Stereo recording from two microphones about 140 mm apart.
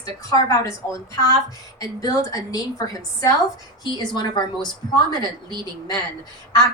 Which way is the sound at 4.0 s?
30° left (ahead or behind).